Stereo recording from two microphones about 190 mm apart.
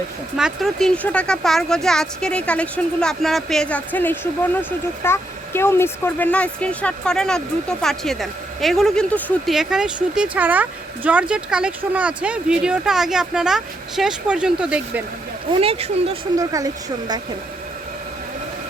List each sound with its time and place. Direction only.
0.3 s speech: centre (ahead or behind)
15.6 s speech: 30° right (ahead or behind)
16.4 s speech: 15° right (ahead or behind)